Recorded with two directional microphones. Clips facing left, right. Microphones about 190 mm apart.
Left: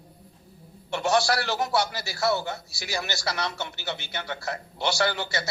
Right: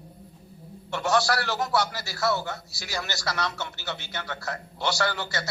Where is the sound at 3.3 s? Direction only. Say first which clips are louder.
Even; 30° left (ahead or behind).